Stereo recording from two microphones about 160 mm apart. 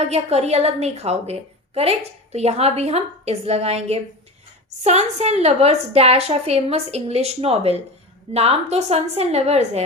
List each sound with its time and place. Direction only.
0.1 s a woman's voice: 40° right (ahead or behind)